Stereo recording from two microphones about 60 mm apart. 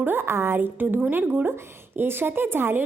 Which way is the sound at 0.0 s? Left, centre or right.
Right.